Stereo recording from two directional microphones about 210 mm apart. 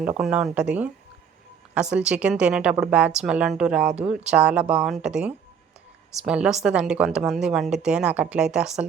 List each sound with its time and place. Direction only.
0.2 s a woman's voice: centre (ahead or behind)